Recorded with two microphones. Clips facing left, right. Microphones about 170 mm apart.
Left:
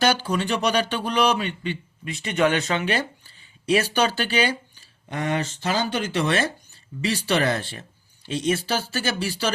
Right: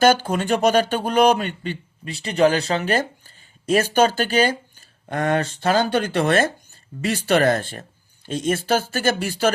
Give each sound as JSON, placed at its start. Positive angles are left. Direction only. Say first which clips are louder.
{"t": 0.0, "sound": "speech", "louder": "right 5 dB", "side_deg": -45}